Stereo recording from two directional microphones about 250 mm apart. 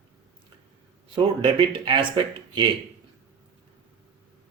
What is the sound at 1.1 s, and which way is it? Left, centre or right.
Speech, centre.